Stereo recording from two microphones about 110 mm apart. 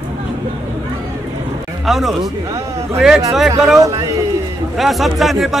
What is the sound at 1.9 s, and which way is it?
A man's voice, centre (ahead or behind).